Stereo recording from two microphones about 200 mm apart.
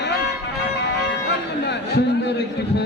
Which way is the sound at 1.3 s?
60° left (ahead or behind).